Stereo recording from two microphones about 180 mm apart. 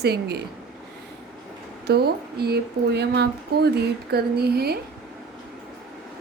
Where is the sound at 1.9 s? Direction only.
60° right (ahead or behind).